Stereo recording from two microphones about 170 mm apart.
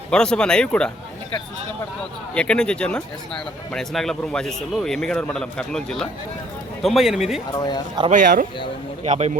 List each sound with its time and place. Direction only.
0.1 s speech: 5° left (ahead or behind)
2.3 s speech: 5° left (ahead or behind)
7.5 s speech: 25° left (ahead or behind)
8.0 s speech: 25° right (ahead or behind)
9.0 s speech: 40° right (ahead or behind)